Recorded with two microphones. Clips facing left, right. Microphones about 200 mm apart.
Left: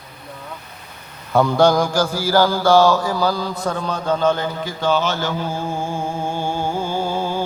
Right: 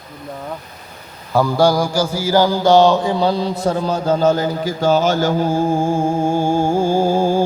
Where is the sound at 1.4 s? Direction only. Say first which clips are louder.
Even; 5° right (ahead or behind).